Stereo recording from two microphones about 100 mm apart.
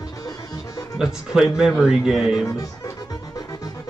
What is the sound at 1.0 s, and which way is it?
Speech, 5° right (ahead or behind).